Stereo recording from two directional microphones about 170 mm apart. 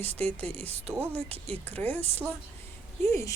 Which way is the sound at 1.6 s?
10° left (ahead or behind).